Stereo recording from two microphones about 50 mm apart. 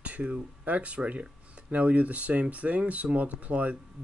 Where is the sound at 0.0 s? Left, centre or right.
Right.